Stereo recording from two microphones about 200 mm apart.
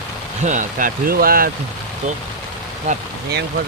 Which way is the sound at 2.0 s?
35° right (ahead or behind).